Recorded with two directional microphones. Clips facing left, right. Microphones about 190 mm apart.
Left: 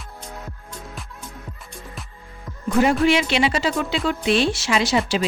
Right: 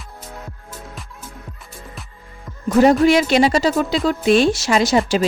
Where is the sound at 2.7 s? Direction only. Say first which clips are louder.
Right 5 dB; 40° right (ahead or behind).